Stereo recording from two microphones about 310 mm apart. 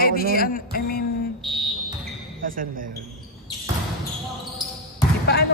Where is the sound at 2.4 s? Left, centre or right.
Right.